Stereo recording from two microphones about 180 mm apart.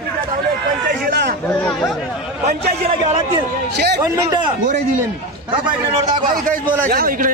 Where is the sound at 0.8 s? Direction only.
60° right (ahead or behind).